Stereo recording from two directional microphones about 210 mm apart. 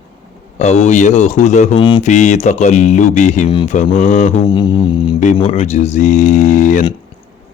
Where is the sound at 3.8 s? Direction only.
35° left (ahead or behind).